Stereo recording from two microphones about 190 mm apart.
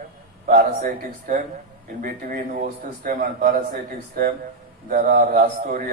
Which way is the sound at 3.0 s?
45° right (ahead or behind).